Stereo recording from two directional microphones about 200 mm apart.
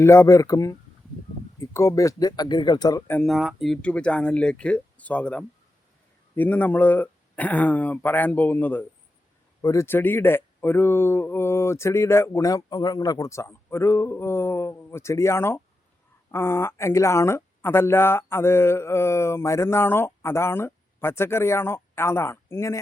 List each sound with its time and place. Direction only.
0.0 s speech: 15° left (ahead or behind)
3.1 s speech: 5° left (ahead or behind)